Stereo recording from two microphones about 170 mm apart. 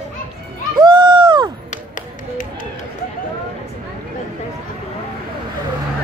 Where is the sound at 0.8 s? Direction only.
30° right (ahead or behind).